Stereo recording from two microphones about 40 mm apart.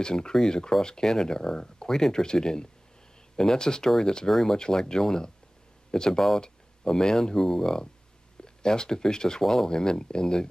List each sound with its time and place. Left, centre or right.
0.0 s speech: centre